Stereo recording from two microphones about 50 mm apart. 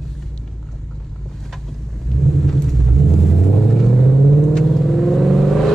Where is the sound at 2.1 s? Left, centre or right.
Centre.